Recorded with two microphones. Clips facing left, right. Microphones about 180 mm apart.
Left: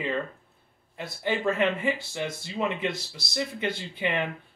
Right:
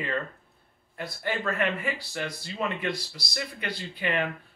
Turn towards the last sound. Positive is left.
turn(degrees=20)  # may be behind; listen again after turning